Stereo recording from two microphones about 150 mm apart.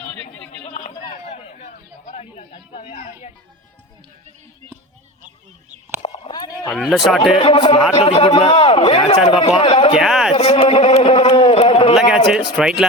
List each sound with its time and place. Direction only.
0.7 s a sound: 55° left (ahead or behind)
1.2 s chatter: 50° left (ahead or behind)
6.3 s a sound: 25° left (ahead or behind)
6.7 s speech: centre (ahead or behind)
7.2 s speech: 35° left (ahead or behind)
8.5 s speech: 40° left (ahead or behind)
10.0 s speech: centre (ahead or behind)
10.3 s speech: 45° left (ahead or behind)
11.0 s a sound: 40° left (ahead or behind)
11.9 s speech: centre (ahead or behind)